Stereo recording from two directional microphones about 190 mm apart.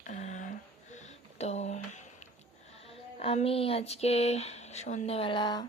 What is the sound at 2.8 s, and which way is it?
Speech, 30° left (ahead or behind).